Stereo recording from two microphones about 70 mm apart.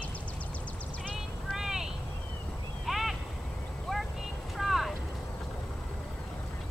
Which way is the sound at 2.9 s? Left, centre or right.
Centre.